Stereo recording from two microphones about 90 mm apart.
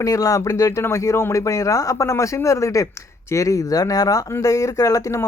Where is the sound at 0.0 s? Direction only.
40° left (ahead or behind).